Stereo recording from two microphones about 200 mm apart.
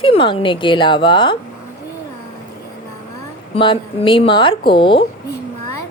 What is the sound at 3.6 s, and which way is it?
Speech, 25° left (ahead or behind).